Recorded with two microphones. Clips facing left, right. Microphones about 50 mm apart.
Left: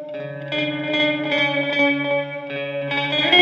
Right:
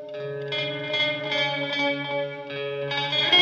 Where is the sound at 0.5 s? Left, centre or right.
Left.